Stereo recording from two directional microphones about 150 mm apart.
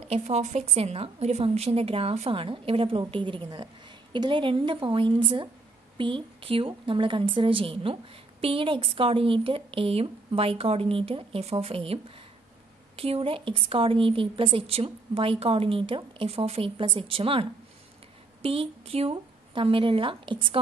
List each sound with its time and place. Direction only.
0.1 s a woman's voice: 50° right (ahead or behind)